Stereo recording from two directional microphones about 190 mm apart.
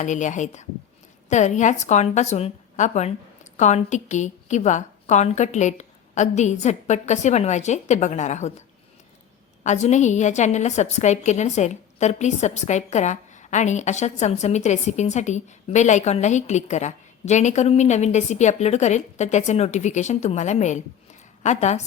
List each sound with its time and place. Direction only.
0.0 s a woman's voice: 40° left (ahead or behind)
9.6 s a woman's voice: 40° left (ahead or behind)